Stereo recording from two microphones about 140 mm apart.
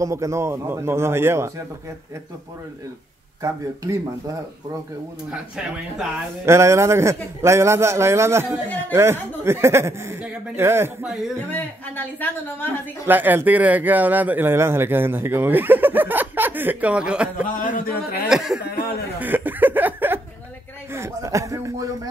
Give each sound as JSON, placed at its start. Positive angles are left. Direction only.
{"t": 0.0, "sound": "a man's voice", "side_deg": -20}
{"t": 3.4, "sound": "a man's voice", "side_deg": -20}
{"t": 5.3, "sound": "speech", "side_deg": -5}
{"t": 6.4, "sound": "a man's voice", "side_deg": -20}
{"t": 11.5, "sound": "a woman's voice", "side_deg": 10}
{"t": 13.0, "sound": "speech", "side_deg": -15}
{"t": 17.5, "sound": "speech", "side_deg": 75}
{"t": 18.3, "sound": "speech", "side_deg": -5}
{"t": 19.1, "sound": "a man's voice", "side_deg": -15}